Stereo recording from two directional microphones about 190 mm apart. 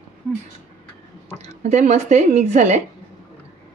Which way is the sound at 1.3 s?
35° right (ahead or behind).